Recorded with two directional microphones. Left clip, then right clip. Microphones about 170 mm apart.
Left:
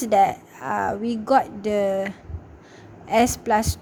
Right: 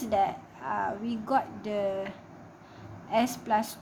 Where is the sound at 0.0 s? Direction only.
40° left (ahead or behind).